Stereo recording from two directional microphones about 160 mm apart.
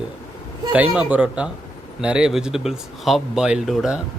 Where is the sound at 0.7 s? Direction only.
10° right (ahead or behind).